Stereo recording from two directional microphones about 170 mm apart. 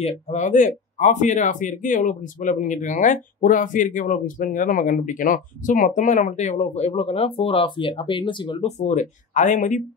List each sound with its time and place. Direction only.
0.0 s speech: 45° left (ahead or behind)